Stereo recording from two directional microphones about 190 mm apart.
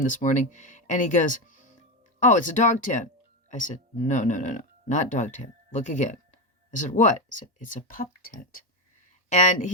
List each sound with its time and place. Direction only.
0.0 s speech: 40° left (ahead or behind)